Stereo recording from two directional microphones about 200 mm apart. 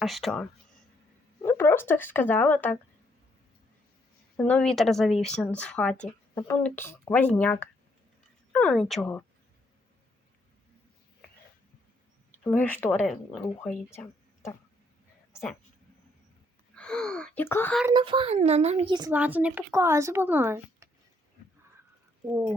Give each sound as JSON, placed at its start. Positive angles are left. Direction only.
{"t": 0.0, "sound": "speech", "side_deg": 0}
{"t": 1.4, "sound": "speech", "side_deg": 10}
{"t": 4.4, "sound": "speech", "side_deg": 5}
{"t": 12.4, "sound": "speech", "side_deg": 5}
{"t": 16.7, "sound": "speech", "side_deg": 5}
{"t": 17.9, "sound": "a child's voice", "side_deg": -25}
{"t": 19.1, "sound": "speech", "side_deg": -5}